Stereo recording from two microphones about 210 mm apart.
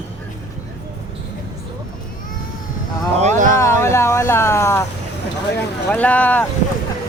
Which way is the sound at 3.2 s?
35° right (ahead or behind).